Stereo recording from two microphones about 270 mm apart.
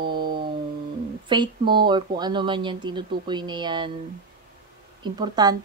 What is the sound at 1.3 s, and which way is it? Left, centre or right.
Speech, centre.